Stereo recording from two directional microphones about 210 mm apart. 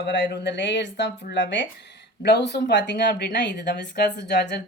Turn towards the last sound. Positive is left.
turn(degrees=50)  # may be behind; listen again after turning